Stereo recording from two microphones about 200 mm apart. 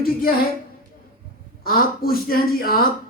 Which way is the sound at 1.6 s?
50° left (ahead or behind).